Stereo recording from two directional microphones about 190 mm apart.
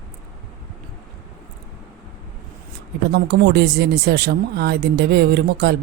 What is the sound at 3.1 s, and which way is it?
Speech, 60° right (ahead or behind).